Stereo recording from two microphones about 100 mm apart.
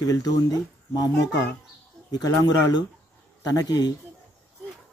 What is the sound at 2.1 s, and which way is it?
Speech, 40° left (ahead or behind).